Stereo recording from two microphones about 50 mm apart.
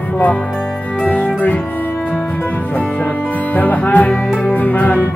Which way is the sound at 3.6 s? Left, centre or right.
Left.